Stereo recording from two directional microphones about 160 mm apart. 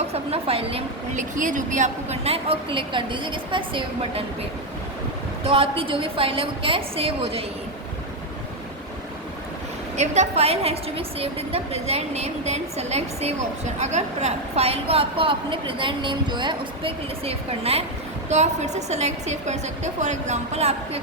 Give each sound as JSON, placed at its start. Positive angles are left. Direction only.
{"t": 0.1, "sound": "a woman's voice", "side_deg": -40}
{"t": 1.1, "sound": "a woman's voice", "side_deg": -55}
{"t": 5.4, "sound": "a woman's voice", "side_deg": -35}
{"t": 10.0, "sound": "a woman's voice", "side_deg": -45}